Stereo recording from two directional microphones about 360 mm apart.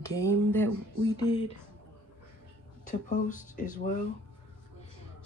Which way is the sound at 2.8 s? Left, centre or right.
Left.